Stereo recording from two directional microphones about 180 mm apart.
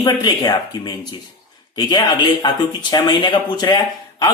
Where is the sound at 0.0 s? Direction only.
25° left (ahead or behind).